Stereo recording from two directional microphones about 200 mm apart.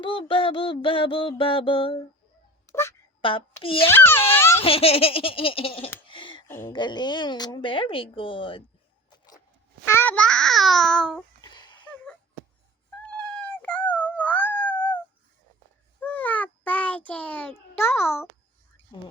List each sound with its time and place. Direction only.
0.0 s a woman's voice: 25° left (ahead or behind)
2.6 s a sound: 10° left (ahead or behind)
3.2 s a woman's voice: 25° left (ahead or behind)
3.8 s a child's voice: 10° left (ahead or behind)
4.6 s a woman's voice: 30° left (ahead or behind)
6.5 s a woman's voice: 15° left (ahead or behind)
9.8 s a child's voice: 10° left (ahead or behind)
11.3 s a sound: 20° left (ahead or behind)
13.0 s cat: 5° left (ahead or behind)
16.0 s child singing: 10° left (ahead or behind)